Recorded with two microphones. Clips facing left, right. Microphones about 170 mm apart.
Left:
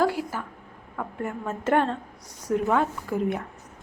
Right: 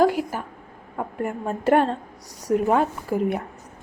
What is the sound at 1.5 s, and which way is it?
A woman's voice, 35° right (ahead or behind).